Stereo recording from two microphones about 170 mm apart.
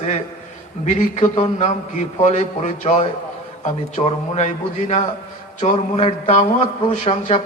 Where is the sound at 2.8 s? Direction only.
40° left (ahead or behind).